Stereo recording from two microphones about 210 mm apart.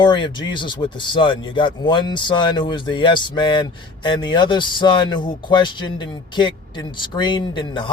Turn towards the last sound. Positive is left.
turn(degrees=20)  # may be behind; listen again after turning